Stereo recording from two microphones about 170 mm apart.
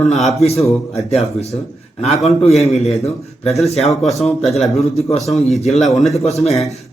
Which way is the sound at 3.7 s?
Centre (ahead or behind).